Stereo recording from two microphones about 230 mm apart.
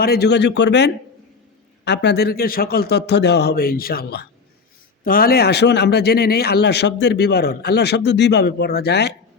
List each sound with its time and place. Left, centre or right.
0.0 s speech: left